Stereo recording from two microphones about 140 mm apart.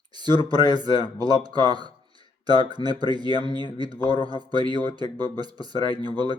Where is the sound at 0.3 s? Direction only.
40° left (ahead or behind).